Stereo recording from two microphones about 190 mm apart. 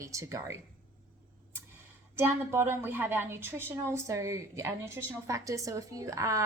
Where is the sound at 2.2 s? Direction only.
10° right (ahead or behind).